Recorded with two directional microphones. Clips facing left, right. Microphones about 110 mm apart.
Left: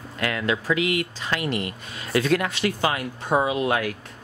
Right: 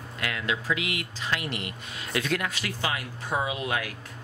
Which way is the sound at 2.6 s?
50° left (ahead or behind).